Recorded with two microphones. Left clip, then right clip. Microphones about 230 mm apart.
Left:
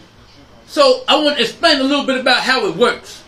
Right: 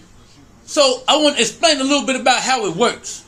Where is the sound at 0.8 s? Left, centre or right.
Centre.